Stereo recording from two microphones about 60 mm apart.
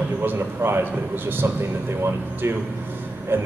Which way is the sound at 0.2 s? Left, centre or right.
Right.